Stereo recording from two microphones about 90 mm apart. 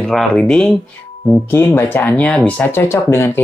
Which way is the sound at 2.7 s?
30° left (ahead or behind).